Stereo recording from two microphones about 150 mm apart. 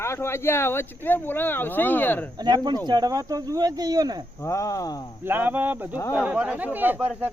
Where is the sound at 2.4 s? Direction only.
30° right (ahead or behind).